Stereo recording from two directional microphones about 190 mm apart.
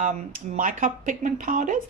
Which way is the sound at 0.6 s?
45° right (ahead or behind).